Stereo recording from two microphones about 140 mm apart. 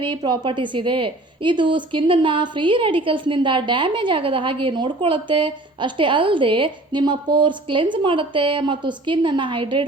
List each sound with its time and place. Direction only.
0.0 s a woman's voice: 35° right (ahead or behind)